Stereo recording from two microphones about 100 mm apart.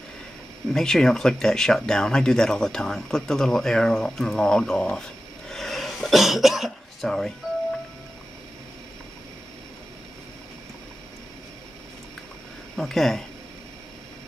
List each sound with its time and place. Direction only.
0.7 s speech: 5° left (ahead or behind)
12.7 s speech: 5° left (ahead or behind)